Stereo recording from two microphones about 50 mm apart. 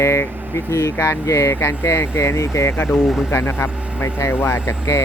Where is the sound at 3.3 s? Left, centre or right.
Left.